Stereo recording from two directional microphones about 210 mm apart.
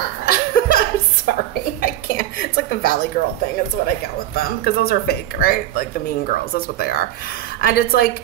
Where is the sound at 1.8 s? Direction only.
45° left (ahead or behind).